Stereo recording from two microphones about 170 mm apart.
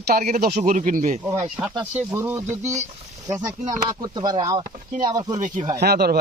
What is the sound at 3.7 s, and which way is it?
Speech, 20° right (ahead or behind).